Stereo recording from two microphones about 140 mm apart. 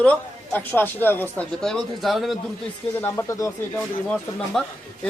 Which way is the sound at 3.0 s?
20° left (ahead or behind).